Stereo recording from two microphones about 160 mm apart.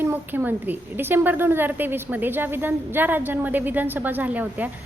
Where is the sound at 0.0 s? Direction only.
10° right (ahead or behind).